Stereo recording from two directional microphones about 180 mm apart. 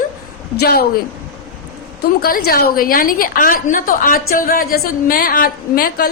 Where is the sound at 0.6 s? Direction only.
60° left (ahead or behind).